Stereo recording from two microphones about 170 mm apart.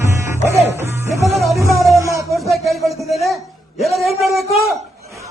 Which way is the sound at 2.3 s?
Centre (ahead or behind).